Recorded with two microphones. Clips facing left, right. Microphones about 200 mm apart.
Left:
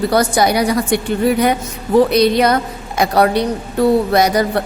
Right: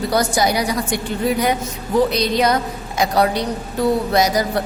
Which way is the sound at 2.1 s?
60° left (ahead or behind).